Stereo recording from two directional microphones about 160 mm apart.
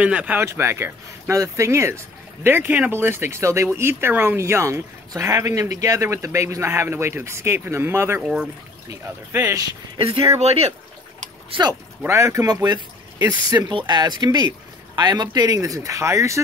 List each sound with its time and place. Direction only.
0.0 s speech: 10° right (ahead or behind)
8.2 s speech: 5° right (ahead or behind)
9.0 s speech: 15° right (ahead or behind)
9.9 s speech: 35° right (ahead or behind)
12.0 s speech: 15° right (ahead or behind)